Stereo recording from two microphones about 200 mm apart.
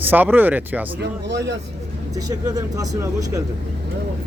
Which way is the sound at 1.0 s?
60° right (ahead or behind).